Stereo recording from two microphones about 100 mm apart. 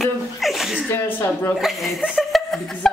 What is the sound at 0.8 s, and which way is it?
Speech, 20° left (ahead or behind).